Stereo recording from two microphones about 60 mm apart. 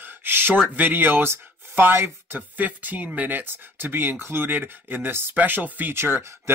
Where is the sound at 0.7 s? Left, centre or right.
Right.